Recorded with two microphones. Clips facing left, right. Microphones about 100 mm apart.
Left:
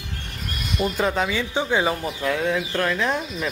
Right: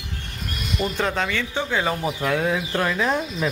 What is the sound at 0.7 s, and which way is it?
Speech, 5° left (ahead or behind).